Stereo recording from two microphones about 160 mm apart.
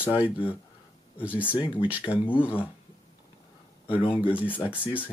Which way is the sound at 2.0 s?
30° left (ahead or behind).